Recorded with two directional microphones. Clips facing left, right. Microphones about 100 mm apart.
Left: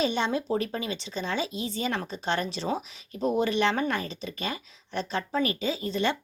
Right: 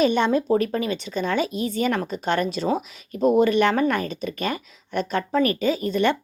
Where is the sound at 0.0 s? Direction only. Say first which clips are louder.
Right 7 dB; 55° right (ahead or behind).